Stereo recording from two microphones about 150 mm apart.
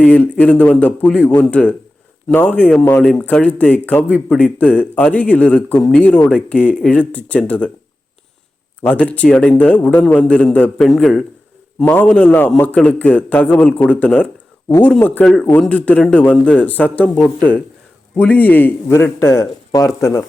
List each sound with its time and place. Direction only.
0.0 s a man's voice: 10° left (ahead or behind)
8.8 s a man's voice: 10° left (ahead or behind)